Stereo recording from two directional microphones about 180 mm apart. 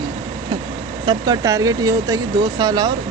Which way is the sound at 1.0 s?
20° right (ahead or behind).